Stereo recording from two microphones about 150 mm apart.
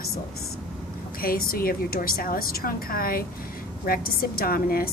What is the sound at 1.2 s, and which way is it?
A woman's voice, 80° left.